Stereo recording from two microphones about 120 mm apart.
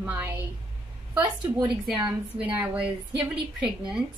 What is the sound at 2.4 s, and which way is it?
A woman's voice, 10° right (ahead or behind).